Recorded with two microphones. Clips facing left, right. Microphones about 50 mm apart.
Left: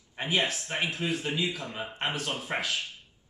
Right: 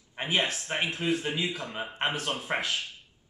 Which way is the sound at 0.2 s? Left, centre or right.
Centre.